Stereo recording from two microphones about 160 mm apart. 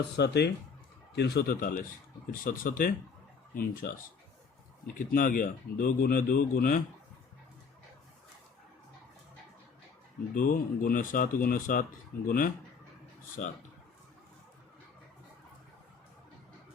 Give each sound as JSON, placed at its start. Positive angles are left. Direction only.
{"t": 0.2, "sound": "speech", "side_deg": 90}
{"t": 4.9, "sound": "speech", "side_deg": 60}
{"t": 10.3, "sound": "speech", "side_deg": 60}